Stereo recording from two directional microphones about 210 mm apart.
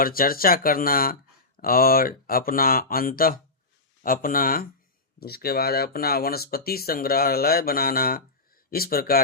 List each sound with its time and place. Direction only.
0.0 s speech: 45° left (ahead or behind)